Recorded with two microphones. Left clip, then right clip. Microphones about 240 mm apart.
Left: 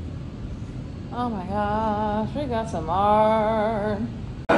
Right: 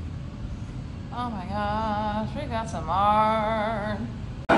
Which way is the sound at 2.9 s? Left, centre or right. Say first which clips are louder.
Left 2 dB; right.